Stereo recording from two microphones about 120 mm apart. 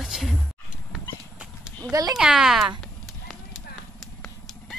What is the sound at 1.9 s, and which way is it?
Speech, 30° right (ahead or behind).